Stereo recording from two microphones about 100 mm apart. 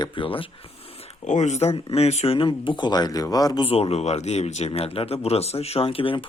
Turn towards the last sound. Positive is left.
turn(degrees=65)  # may be behind; listen again after turning